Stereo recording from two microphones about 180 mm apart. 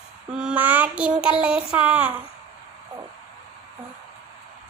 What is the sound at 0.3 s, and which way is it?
Child singing, 10° right (ahead or behind).